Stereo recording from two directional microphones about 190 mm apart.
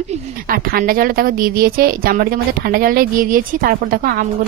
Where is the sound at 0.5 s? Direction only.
50° right (ahead or behind).